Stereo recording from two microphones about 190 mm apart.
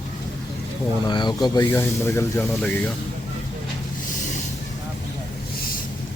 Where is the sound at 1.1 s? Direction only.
25° left (ahead or behind).